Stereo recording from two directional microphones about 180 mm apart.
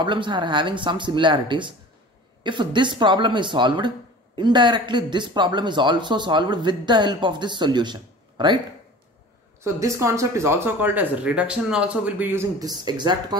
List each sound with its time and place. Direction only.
0.0 s speech: 25° right (ahead or behind)
9.6 s speech: 15° right (ahead or behind)